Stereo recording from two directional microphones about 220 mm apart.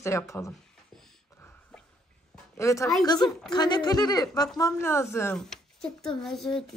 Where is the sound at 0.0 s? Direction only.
15° left (ahead or behind).